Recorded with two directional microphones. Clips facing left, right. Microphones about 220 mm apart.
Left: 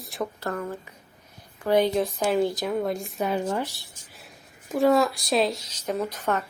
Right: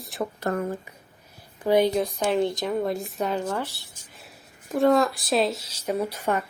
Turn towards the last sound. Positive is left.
turn(degrees=-10)  # may be behind; listen again after turning